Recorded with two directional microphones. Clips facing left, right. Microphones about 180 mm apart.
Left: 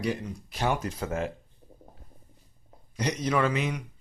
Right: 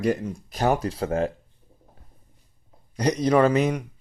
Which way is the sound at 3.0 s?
40° right (ahead or behind).